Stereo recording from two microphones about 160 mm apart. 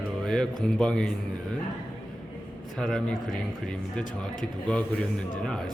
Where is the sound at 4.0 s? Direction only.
55° left (ahead or behind).